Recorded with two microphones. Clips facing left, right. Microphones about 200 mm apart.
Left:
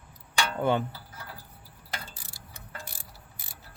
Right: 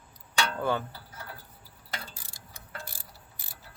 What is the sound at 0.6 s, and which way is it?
Speech, 20° left (ahead or behind).